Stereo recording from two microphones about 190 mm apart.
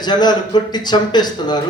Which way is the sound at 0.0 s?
20° left (ahead or behind).